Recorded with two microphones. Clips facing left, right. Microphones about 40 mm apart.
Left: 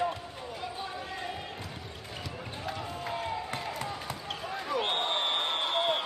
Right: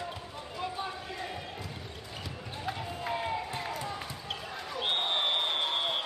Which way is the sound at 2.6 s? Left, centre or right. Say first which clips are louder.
Right 1 dB; centre.